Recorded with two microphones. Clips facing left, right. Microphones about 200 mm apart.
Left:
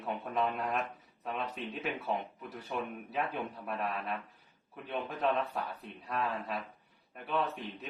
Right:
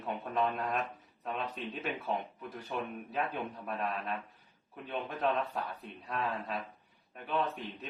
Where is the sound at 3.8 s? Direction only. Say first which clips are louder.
Even; 10° left (ahead or behind).